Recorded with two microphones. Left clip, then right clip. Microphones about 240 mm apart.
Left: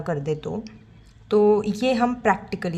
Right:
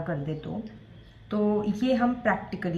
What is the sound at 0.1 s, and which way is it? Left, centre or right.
A woman's voice, left.